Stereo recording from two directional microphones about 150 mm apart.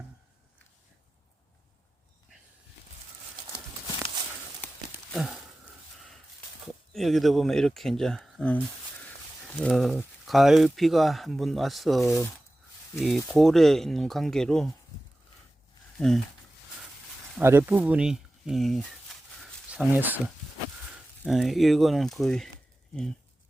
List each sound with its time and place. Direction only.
5.1 s a sound: 5° right (ahead or behind)
6.9 s speech: centre (ahead or behind)
16.0 s speech: 5° left (ahead or behind)
17.3 s speech: 15° right (ahead or behind); by 18.9 s centre (ahead or behind)
19.7 s speech: 10° right (ahead or behind)
21.2 s speech: centre (ahead or behind)